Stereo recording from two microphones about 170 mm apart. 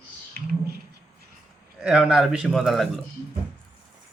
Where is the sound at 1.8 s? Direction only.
5° right (ahead or behind).